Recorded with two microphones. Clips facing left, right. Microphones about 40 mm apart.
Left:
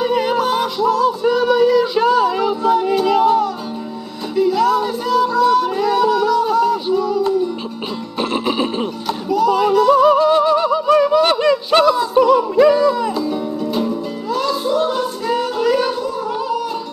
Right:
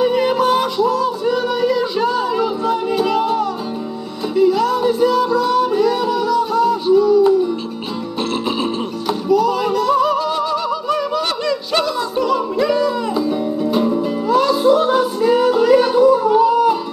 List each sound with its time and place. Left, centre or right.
0.0 s music: centre
8.2 s music: centre
9.0 s music: centre
10.0 s music: left
11.0 s a sound: left
12.7 s music: centre